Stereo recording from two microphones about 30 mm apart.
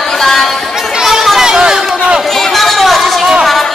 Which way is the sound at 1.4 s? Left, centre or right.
Right.